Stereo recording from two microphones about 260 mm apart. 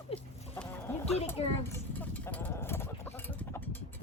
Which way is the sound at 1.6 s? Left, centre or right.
Centre.